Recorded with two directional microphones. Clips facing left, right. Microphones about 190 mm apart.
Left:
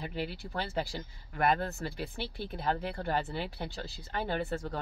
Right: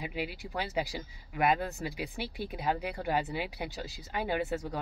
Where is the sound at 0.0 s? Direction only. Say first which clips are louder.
Even; 10° right (ahead or behind).